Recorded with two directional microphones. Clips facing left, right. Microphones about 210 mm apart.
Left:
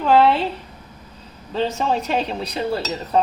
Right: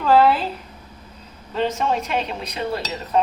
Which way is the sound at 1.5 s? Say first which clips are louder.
Left 1 dB; 30° left (ahead or behind).